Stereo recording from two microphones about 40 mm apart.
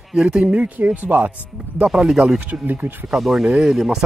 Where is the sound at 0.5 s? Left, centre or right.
Right.